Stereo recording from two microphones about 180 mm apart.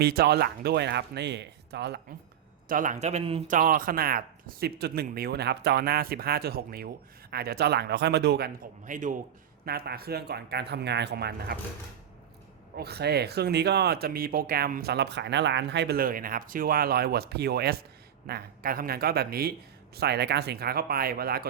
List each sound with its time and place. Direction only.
0.0 s speech: 60° right (ahead or behind)
2.6 s speech: 50° right (ahead or behind); by 8.4 s 65° right (ahead or behind)
8.8 s a man's voice: 45° right (ahead or behind)
9.6 s speech: 60° right (ahead or behind)
12.7 s speech: 65° right (ahead or behind)